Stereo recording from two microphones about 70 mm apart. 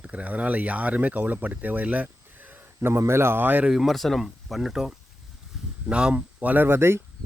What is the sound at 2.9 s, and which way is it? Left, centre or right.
Speech, right.